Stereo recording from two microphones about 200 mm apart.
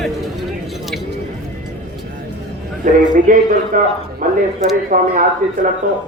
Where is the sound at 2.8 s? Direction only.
40° right (ahead or behind).